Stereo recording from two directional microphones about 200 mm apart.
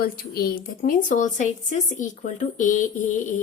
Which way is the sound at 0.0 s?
50° left (ahead or behind).